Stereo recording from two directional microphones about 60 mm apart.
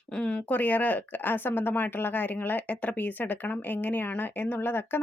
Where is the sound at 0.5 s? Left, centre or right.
Left.